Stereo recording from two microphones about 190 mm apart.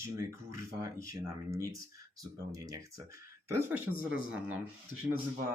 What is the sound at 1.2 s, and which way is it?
Speech, 15° right (ahead or behind).